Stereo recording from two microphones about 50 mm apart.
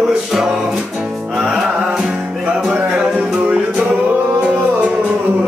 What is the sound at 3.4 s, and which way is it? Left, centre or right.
Music, right.